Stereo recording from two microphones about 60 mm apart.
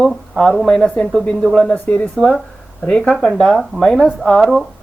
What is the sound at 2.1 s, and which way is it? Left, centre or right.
A woman's voice, centre.